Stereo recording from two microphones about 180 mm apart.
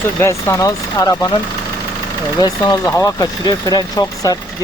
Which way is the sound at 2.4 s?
20° left (ahead or behind).